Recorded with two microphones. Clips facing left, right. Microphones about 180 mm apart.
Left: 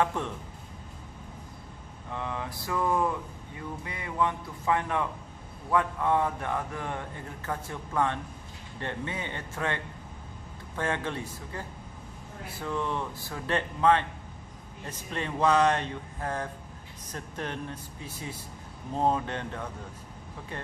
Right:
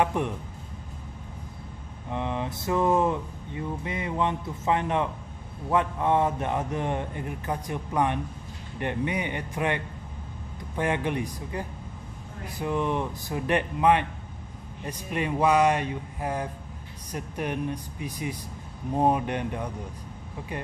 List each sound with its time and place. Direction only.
0.0 s speech: 15° right (ahead or behind)
2.0 s speech: 20° right (ahead or behind)
10.8 s speech: 15° right (ahead or behind)